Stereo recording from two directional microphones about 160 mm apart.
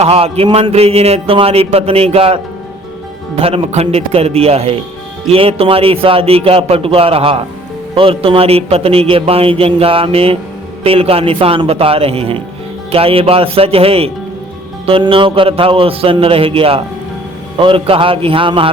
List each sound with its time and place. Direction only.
0.0 s a man's voice: 40° right (ahead or behind)